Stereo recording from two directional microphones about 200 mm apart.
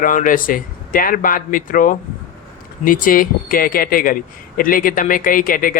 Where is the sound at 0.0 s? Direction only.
40° left (ahead or behind).